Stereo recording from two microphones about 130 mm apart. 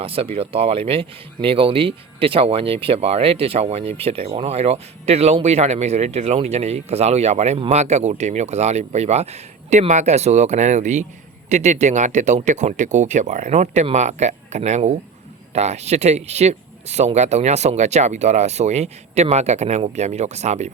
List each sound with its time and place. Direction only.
0.0 s speech: 45° right (ahead or behind); by 20.7 s 60° right (ahead or behind)